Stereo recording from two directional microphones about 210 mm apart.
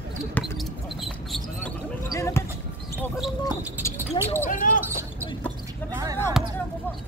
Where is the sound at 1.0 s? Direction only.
Centre (ahead or behind).